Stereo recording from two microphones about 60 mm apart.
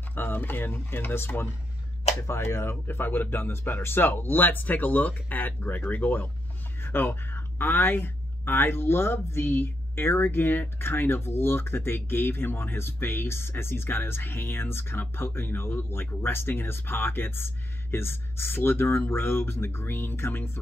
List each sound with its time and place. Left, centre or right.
0.1 s speech: left